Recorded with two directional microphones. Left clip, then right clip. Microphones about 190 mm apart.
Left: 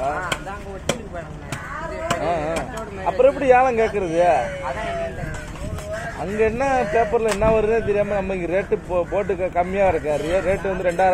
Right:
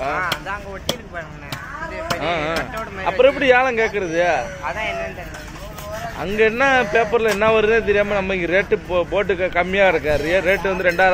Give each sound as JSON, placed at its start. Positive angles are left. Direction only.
{"t": 0.0, "sound": "chop", "side_deg": -20}
{"t": 2.2, "sound": "music", "side_deg": -20}
{"t": 3.0, "sound": "speech", "side_deg": -20}
{"t": 6.2, "sound": "speech", "side_deg": -15}